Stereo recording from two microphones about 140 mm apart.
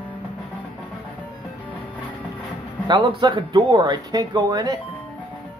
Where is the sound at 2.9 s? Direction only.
35° right (ahead or behind).